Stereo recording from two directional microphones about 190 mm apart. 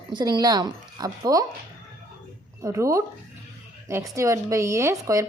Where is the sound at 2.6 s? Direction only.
15° right (ahead or behind).